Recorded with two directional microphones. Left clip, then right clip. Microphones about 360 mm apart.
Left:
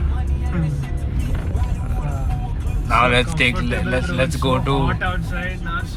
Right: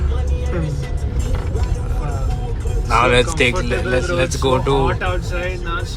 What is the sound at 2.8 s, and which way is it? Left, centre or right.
Speech, centre.